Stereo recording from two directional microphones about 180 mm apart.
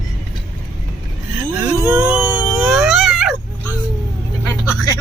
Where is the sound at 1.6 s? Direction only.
10° right (ahead or behind).